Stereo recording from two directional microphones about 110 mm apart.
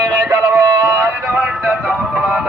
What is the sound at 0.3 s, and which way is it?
Music, 15° right (ahead or behind).